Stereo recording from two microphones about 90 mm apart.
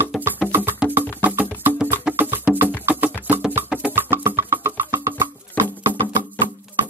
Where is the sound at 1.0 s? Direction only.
20° right (ahead or behind).